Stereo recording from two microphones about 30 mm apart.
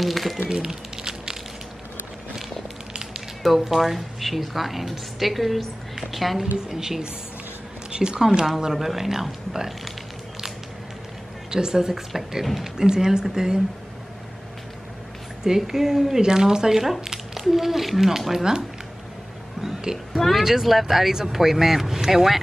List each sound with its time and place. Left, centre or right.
0.0 s a sound: centre
0.7 s a sound: right
2.9 s a sound: right
3.5 s a woman's voice: centre
6.8 s speech: right
7.9 s a sound: right
8.2 s speech: right
8.7 s speech: centre
11.5 s speech: right
11.9 s a woman's voice: centre
15.4 s speech: centre
16.2 s speech: right
20.2 s a woman's voice: centre
20.4 s speech: centre